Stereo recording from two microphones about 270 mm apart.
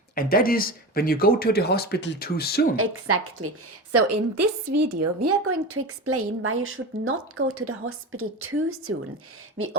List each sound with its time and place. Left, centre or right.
0.2 s speech: left
2.7 s a woman's voice: right